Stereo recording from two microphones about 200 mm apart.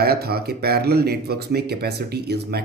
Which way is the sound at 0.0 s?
50° right (ahead or behind).